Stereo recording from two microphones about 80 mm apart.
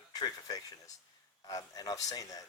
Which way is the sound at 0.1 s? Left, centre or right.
Left.